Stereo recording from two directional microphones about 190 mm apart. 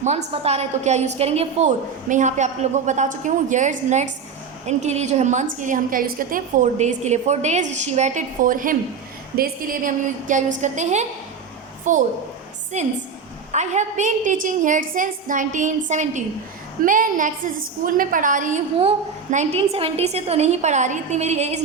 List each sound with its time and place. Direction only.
0.0 s a woman's voice: 35° right (ahead or behind)
13.5 s a woman's voice: 40° right (ahead or behind)